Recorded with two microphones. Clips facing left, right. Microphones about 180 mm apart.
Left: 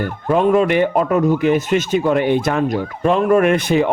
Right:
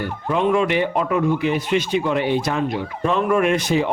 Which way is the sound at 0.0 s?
45° left (ahead or behind).